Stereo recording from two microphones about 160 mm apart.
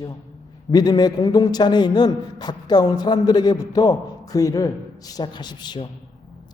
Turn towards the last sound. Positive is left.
turn(degrees=25)  # may be behind; listen again after turning